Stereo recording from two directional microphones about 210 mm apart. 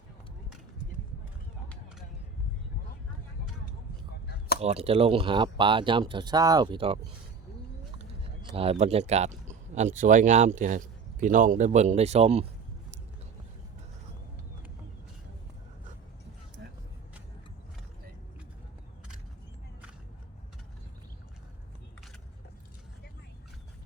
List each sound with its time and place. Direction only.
4.6 s speech: 30° right (ahead or behind)